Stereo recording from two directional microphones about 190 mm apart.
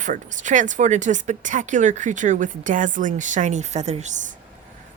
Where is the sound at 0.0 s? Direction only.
40° right (ahead or behind).